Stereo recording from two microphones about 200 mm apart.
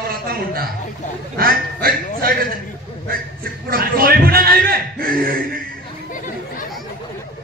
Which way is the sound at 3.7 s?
50° right (ahead or behind).